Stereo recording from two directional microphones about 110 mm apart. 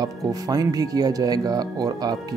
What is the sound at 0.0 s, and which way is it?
Speech, 35° right (ahead or behind).